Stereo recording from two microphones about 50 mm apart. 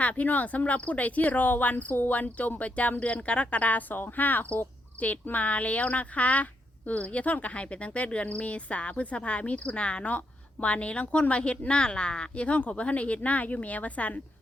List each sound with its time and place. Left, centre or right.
0.0 s speech: left